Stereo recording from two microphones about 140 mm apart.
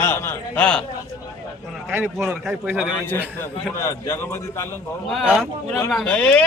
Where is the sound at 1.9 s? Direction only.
15° right (ahead or behind).